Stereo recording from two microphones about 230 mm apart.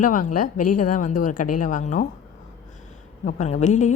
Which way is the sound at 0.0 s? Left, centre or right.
Left.